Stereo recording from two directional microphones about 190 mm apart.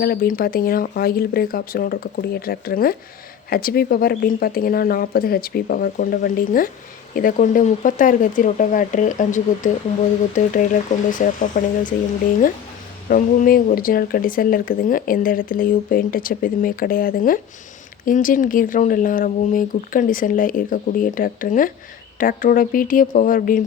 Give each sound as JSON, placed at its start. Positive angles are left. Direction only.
{"t": 0.0, "sound": "speech", "side_deg": 50}
{"t": 13.1, "sound": "speech", "side_deg": 45}